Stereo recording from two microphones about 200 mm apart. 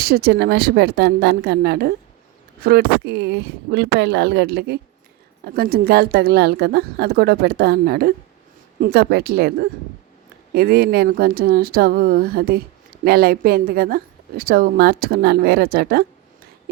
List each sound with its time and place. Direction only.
0.0 s a woman's voice: 50° right (ahead or behind)